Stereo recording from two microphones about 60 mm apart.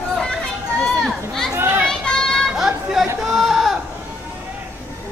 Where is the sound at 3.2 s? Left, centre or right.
Centre.